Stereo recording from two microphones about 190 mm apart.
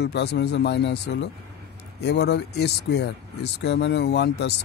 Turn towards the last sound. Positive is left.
turn(degrees=60)  # may be behind; listen again after turning